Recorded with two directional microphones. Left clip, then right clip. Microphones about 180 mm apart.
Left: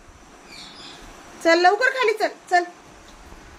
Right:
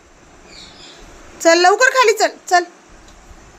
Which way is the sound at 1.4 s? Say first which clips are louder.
Right 5 dB; 45° right (ahead or behind).